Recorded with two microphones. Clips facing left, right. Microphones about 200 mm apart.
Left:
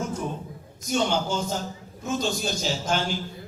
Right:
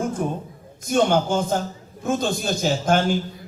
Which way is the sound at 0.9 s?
55° right (ahead or behind).